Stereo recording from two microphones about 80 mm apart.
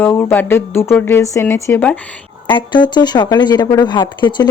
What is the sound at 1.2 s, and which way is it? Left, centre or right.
Speech, left.